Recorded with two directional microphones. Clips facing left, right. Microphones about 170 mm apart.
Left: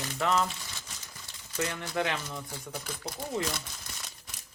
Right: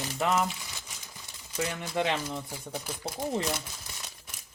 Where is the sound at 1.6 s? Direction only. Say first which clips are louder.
Right 1 dB; 15° right (ahead or behind).